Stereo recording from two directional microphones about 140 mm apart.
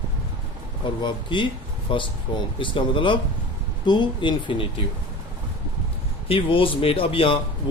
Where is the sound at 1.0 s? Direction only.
35° left (ahead or behind).